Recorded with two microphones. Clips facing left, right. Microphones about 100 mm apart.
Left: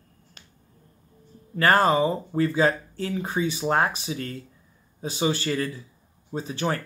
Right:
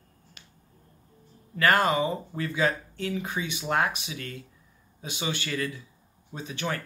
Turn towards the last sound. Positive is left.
turn(degrees=35)  # may be behind; listen again after turning